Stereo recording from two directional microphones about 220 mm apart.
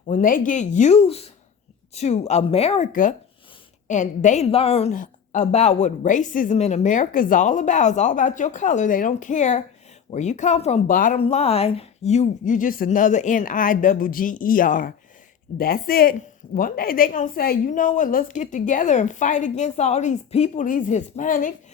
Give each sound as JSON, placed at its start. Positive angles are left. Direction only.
{"t": 0.1, "sound": "a woman's voice", "side_deg": 35}